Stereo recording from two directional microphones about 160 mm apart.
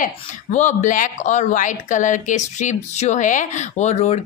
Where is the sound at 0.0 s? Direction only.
50° left (ahead or behind).